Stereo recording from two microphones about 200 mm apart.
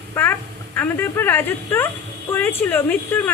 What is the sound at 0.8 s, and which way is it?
Speech, 10° left (ahead or behind).